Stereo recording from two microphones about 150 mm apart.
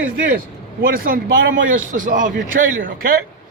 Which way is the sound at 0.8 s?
75° right (ahead or behind).